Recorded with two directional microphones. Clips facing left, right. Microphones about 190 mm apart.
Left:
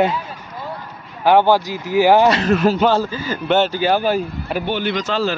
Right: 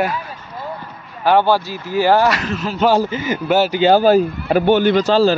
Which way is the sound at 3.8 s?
35° right (ahead or behind).